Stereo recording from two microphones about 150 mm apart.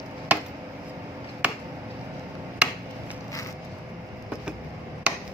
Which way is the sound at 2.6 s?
5° right (ahead or behind).